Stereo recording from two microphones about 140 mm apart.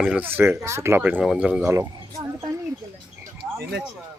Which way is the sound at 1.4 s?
10° right (ahead or behind).